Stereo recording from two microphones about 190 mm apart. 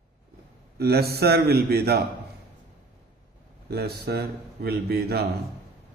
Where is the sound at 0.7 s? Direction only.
55° right (ahead or behind).